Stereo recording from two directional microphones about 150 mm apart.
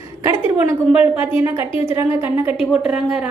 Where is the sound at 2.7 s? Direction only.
5° right (ahead or behind).